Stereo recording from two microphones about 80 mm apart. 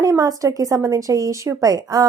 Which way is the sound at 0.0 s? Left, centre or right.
Right.